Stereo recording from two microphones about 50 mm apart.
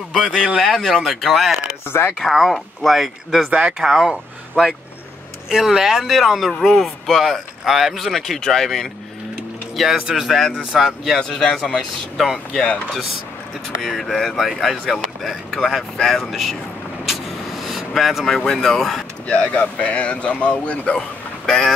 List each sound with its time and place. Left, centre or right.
0.1 s speech: centre
0.6 s speech: centre
1.9 s speech: left
2.1 s speech: centre
3.4 s speech: right
3.7 s speech: centre
9.9 s speech: centre
10.2 s speech: centre
11.1 s speech: centre
13.7 s speech: centre
17.0 s vehicle: centre
19.2 s speech: left